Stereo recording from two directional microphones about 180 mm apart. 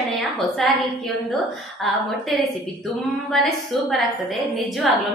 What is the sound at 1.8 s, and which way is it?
A woman's voice, centre (ahead or behind).